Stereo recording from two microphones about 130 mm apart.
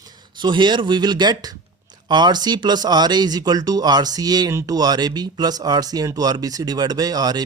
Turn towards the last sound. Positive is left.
turn(degrees=-30)  # may be behind; listen again after turning